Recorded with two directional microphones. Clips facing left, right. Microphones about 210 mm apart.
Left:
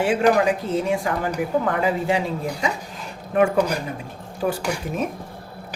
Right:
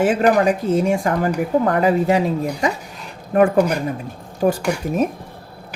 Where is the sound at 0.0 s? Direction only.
40° right (ahead or behind).